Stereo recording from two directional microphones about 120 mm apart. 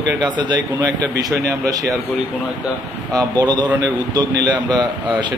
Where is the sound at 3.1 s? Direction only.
35° right (ahead or behind).